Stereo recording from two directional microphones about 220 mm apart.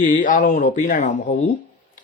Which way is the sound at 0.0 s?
35° left (ahead or behind).